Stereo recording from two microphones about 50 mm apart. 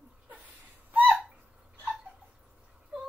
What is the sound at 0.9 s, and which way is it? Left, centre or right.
Hiccup, right.